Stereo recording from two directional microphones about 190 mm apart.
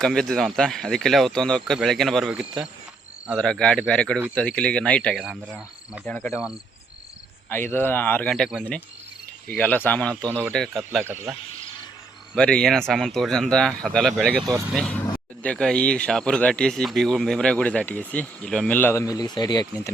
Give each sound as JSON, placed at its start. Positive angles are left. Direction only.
{"t": 0.0, "sound": "speech", "side_deg": 0}
{"t": 7.5, "sound": "speech", "side_deg": 10}
{"t": 11.0, "sound": "speech", "side_deg": -10}
{"t": 12.3, "sound": "speech", "side_deg": 5}